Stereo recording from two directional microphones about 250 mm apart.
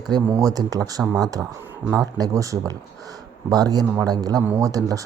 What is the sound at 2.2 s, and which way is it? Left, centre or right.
Speech, centre.